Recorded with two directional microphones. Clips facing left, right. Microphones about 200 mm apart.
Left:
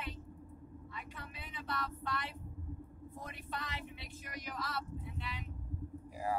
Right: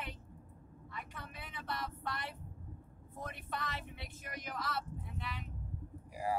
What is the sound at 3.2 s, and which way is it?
Speech, 50° right (ahead or behind).